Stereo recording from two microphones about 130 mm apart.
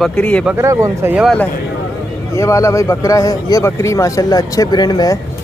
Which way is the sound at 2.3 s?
25° left (ahead or behind).